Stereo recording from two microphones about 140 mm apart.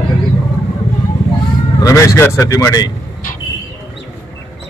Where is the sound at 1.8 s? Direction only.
20° left (ahead or behind).